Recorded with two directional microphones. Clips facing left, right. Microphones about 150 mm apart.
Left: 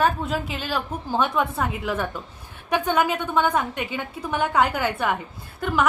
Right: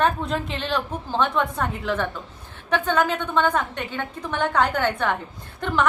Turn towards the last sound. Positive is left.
turn(degrees=5)  # may be behind; listen again after turning